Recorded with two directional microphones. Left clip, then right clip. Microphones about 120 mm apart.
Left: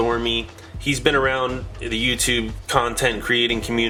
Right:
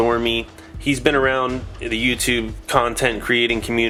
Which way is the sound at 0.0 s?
30° right (ahead or behind).